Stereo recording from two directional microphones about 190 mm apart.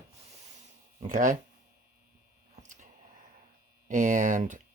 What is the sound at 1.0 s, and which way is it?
Speech, 45° right (ahead or behind).